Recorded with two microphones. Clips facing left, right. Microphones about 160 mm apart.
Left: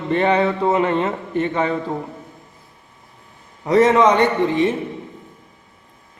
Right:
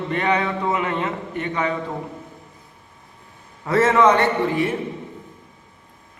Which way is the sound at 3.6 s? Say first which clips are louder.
Left 3 dB; 15° left (ahead or behind).